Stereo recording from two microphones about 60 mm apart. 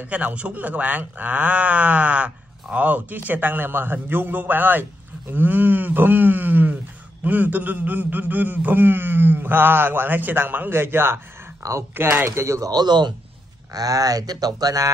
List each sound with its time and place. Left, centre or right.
0.1 s a man's voice: right
11.6 s speech: right
12.0 s a man's voice: right
12.3 s speech: right
13.7 s speech: right